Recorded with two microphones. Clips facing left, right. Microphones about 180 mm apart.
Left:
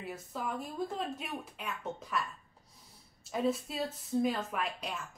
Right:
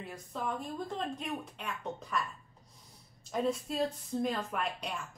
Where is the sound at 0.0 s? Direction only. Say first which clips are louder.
Even; 5° left (ahead or behind).